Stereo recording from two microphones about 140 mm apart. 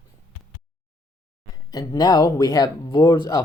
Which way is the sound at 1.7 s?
25° left (ahead or behind).